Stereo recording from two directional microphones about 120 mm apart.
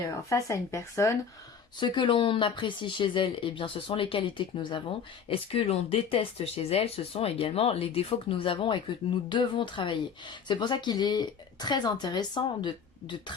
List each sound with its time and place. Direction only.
0.3 s speech: 25° left (ahead or behind)
1.8 s speech: 45° left (ahead or behind)
5.3 s speech: 55° left (ahead or behind); by 13.3 s 40° left (ahead or behind)